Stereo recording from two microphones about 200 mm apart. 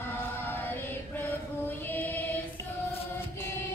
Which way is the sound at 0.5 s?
10° left (ahead or behind).